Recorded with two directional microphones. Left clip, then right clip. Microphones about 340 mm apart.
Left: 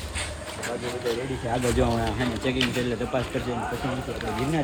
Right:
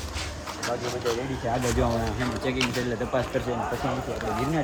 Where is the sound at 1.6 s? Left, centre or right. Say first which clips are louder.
Left 4 dB; centre.